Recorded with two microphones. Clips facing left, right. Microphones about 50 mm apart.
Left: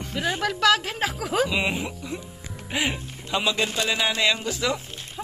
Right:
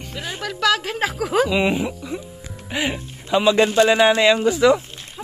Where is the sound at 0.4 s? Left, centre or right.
Left.